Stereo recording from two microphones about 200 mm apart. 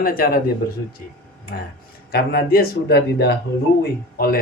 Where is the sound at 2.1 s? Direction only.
50° left (ahead or behind).